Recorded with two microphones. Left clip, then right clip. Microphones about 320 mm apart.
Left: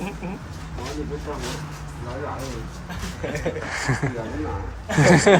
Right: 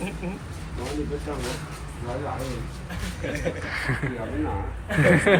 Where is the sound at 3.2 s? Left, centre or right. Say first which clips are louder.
Left 2 dB; centre.